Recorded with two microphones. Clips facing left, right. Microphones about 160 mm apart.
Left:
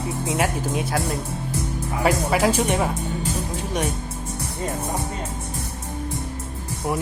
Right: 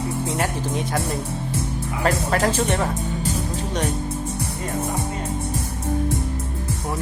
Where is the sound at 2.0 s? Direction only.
10° left (ahead or behind).